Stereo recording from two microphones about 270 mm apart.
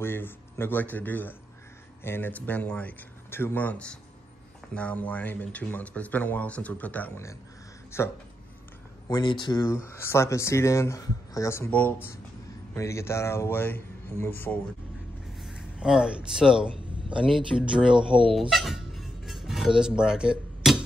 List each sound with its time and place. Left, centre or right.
0.0 s speech: centre
9.1 s speech: centre
17.9 s speech: centre
18.5 s music: centre